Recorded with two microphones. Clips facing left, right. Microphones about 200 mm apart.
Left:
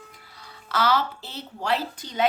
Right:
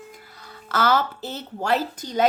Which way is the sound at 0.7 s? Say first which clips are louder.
Right 2 dB; 50° right (ahead or behind).